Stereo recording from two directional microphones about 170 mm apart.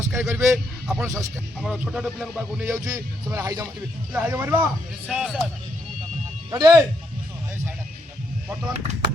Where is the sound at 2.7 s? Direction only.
15° right (ahead or behind).